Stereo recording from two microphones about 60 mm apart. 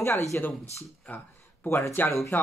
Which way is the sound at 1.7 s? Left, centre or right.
Left.